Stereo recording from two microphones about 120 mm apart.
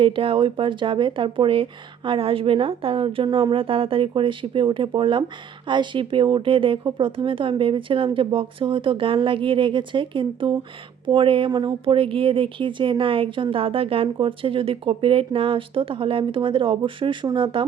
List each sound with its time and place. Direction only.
0.0 s speech: 45° right (ahead or behind)